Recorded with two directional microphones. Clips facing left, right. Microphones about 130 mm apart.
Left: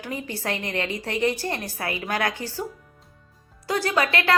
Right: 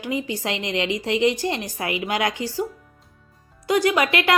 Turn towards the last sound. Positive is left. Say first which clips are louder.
# right 2 dB
turn(degrees=-20)  # may be behind; listen again after turning